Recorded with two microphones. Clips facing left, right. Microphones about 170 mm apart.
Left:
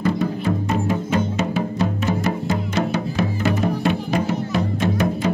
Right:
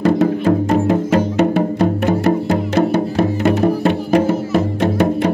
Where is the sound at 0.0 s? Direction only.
75° right (ahead or behind).